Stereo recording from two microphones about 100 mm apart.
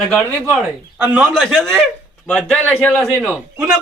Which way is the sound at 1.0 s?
10° right (ahead or behind).